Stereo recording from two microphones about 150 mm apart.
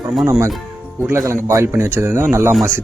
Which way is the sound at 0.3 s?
20° right (ahead or behind).